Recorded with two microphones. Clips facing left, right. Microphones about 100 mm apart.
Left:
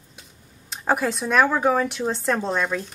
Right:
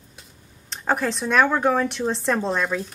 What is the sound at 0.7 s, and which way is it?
Speech, 5° left (ahead or behind).